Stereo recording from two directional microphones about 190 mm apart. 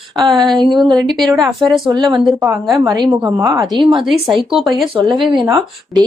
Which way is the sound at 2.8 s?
15° right (ahead or behind).